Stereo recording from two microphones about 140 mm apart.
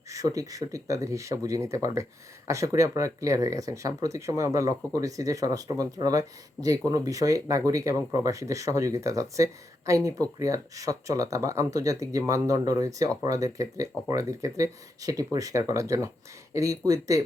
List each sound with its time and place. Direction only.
0.1 s speech: 25° right (ahead or behind)